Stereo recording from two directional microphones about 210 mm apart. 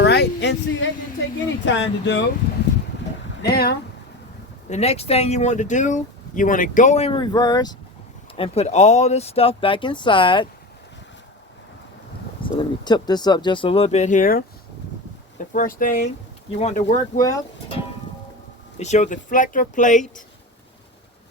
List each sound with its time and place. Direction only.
0.0 s a sound: 55° left (ahead or behind)
1.6 s speech: 60° left (ahead or behind)
3.4 s speech: 50° left (ahead or behind)
4.7 s speech: 30° left (ahead or behind)
8.4 s speech: 30° left (ahead or behind)
12.4 s speech: 25° left (ahead or behind); by 14.4 s 40° left (ahead or behind)
15.5 s speech: 40° left (ahead or behind)
18.8 s speech: 35° left (ahead or behind)